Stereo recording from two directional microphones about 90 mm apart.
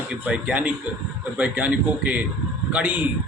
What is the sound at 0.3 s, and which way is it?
A man's voice, 15° right (ahead or behind).